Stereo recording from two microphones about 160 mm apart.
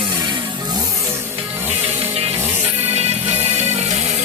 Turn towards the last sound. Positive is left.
turn(degrees=-40)  # may be behind; listen again after turning